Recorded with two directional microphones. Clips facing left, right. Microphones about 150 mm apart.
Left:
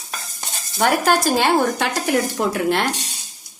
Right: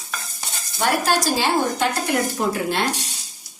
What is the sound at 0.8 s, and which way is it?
Speech, 55° left (ahead or behind).